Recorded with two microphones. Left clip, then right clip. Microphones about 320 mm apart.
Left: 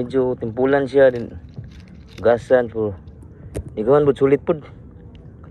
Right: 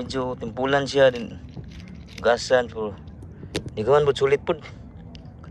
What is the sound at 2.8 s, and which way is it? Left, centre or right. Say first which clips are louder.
Speech: left 6 dB; right.